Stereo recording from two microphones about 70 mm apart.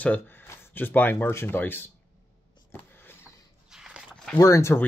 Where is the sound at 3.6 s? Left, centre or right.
Centre.